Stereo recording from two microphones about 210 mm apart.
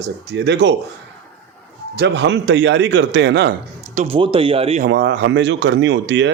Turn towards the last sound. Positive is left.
turn(degrees=-60)  # may be behind; listen again after turning